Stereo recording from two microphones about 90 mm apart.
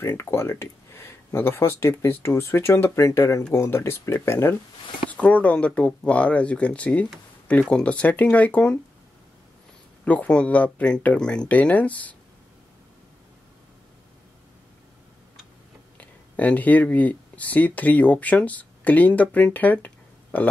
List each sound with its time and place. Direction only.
0.0 s speech: 30° left (ahead or behind)
5.1 s speech: 15° left (ahead or behind)
10.0 s speech: 15° left (ahead or behind)
16.0 s speech: 15° left (ahead or behind)